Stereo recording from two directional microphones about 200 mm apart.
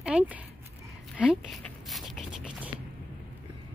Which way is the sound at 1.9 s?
Centre (ahead or behind).